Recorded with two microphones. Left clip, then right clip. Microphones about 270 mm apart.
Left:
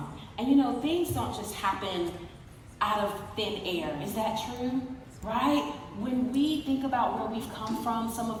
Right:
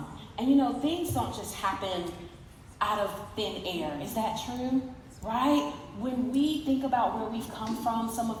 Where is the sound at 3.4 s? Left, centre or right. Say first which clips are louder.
Left 1 dB; centre.